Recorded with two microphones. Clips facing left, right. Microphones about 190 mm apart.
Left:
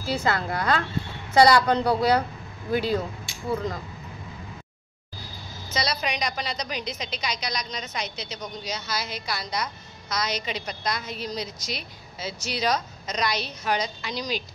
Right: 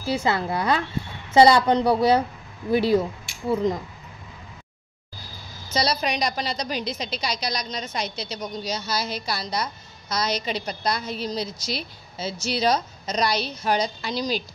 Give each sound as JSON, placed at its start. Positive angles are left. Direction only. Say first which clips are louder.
{"t": 0.0, "sound": "a woman's voice", "louder": "right 2 dB", "side_deg": -25}
{"t": 5.7, "sound": "a woman's voice", "louder": "right 4 dB", "side_deg": -30}